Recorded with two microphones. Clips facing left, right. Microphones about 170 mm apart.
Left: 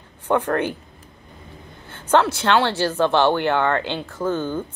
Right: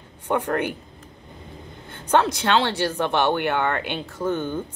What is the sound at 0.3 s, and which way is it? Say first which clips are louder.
Speech: left 3 dB; 15° right (ahead or behind).